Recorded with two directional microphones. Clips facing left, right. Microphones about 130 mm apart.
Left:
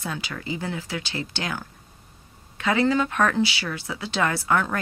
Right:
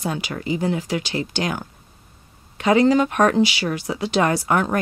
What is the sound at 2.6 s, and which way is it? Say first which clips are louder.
Speech: right 6 dB; 15° right (ahead or behind).